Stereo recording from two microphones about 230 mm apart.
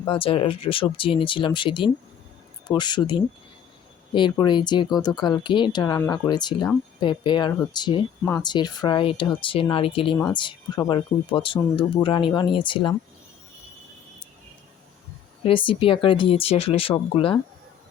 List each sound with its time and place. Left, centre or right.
0.1 s speech: left
15.4 s speech: left